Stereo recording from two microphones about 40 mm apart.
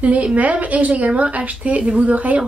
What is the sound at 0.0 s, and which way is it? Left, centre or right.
A woman's voice, right.